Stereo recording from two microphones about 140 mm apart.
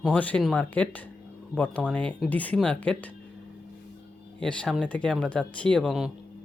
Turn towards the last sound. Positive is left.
turn(degrees=0)  # may be behind; listen again after turning